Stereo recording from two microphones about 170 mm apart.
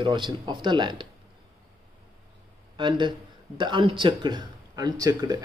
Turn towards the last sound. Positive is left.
turn(degrees=-20)  # may be behind; listen again after turning